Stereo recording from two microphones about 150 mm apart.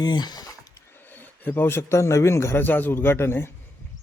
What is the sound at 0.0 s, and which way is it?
Speech, 30° left (ahead or behind).